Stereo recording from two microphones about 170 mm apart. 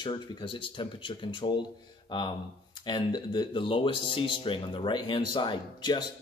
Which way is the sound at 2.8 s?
25° left (ahead or behind).